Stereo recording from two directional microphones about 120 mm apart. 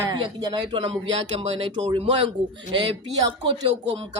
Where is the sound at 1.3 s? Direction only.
55° right (ahead or behind).